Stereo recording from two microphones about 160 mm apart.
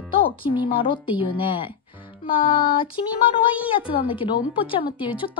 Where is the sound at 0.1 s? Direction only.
30° left (ahead or behind).